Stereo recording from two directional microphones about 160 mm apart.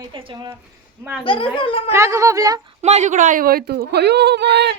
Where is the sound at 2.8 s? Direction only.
45° right (ahead or behind).